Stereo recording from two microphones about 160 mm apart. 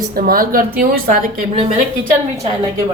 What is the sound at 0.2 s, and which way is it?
A woman's voice, 65° right (ahead or behind).